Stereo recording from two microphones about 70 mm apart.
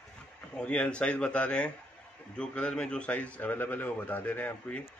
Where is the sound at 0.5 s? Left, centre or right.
Centre.